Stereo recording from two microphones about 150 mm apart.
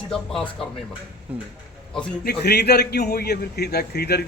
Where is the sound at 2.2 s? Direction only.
90° left.